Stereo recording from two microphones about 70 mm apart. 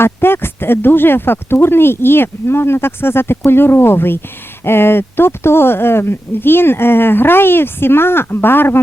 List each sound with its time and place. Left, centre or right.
0.0 s speech: left